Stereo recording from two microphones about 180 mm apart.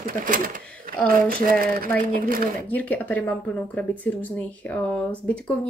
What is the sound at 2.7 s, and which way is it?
Speech, 10° left (ahead or behind).